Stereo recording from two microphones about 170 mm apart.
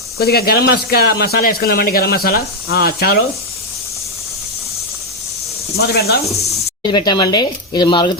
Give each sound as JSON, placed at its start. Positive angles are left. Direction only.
{"t": 0.2, "sound": "speech", "side_deg": 65}
{"t": 5.8, "sound": "speech", "side_deg": 65}
{"t": 6.9, "sound": "speech", "side_deg": 25}